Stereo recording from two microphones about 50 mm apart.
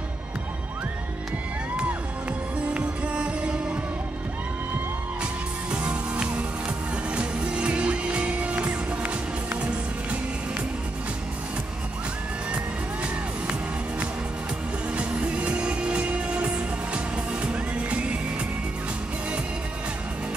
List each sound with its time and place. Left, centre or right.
2.6 s music: right
5.2 s music: right
13.0 s music: right